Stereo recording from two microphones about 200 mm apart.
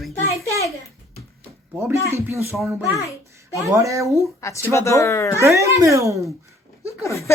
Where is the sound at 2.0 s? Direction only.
15° right (ahead or behind).